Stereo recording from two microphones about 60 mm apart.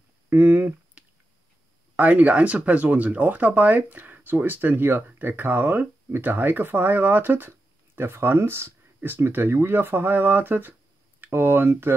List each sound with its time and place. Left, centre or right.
0.3 s speech: right
1.0 s a sound: centre
2.0 s speech: right